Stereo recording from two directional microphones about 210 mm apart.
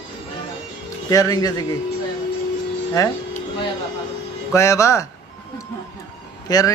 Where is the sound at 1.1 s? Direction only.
15° left (ahead or behind).